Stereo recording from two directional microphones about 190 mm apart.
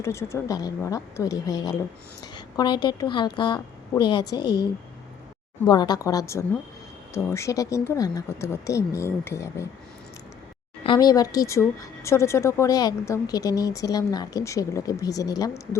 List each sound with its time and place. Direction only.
0.0 s a woman's voice: 15° left (ahead or behind)
5.6 s a woman's voice: 20° left (ahead or behind)
10.8 s speech: 20° left (ahead or behind)